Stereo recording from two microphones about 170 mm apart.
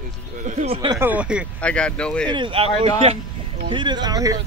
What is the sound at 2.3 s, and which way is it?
Speech, 30° right (ahead or behind).